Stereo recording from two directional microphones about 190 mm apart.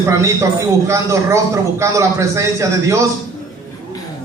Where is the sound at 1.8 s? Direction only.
15° right (ahead or behind).